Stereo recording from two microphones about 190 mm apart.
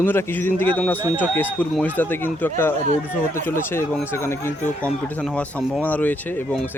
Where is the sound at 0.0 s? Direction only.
10° left (ahead or behind).